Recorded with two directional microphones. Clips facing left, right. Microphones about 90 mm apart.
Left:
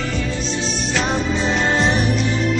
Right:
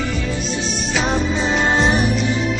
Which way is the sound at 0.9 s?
Centre (ahead or behind).